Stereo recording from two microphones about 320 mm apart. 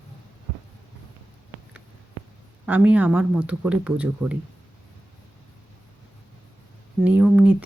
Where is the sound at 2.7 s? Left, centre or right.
Centre.